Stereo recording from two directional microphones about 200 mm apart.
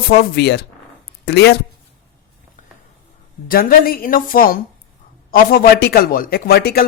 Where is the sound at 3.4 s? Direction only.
45° left (ahead or behind).